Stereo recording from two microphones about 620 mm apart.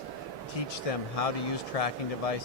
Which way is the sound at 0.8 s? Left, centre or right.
Left.